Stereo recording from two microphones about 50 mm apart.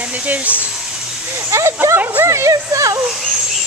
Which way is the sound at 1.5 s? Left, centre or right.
Right.